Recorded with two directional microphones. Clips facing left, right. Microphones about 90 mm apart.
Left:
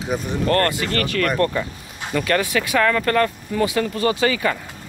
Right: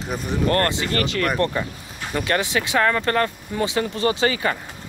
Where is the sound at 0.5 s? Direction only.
25° right (ahead or behind).